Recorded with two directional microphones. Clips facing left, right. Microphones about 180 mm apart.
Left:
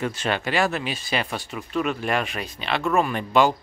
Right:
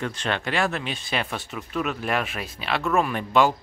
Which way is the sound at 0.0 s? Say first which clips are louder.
Left 2 dB; 5° left (ahead or behind).